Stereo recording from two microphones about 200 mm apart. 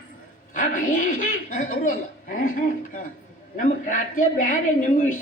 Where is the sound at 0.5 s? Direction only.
40° left (ahead or behind).